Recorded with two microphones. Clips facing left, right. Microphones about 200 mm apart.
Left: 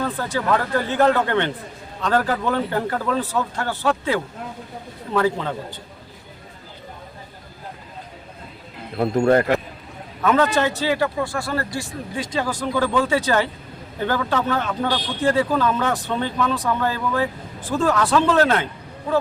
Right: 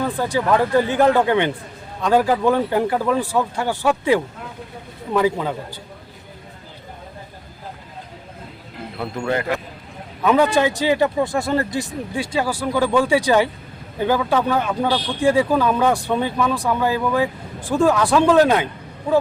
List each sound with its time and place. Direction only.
0.0 s speech: 15° right (ahead or behind)
9.0 s speech: 45° left (ahead or behind)
10.2 s speech: 15° right (ahead or behind)